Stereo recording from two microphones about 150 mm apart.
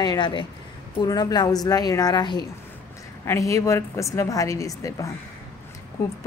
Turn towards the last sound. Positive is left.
turn(degrees=20)  # may be behind; listen again after turning